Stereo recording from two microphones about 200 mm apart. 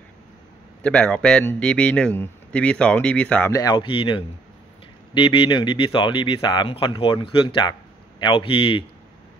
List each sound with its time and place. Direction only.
0.8 s speech: 5° left (ahead or behind); by 8.8 s 25° left (ahead or behind)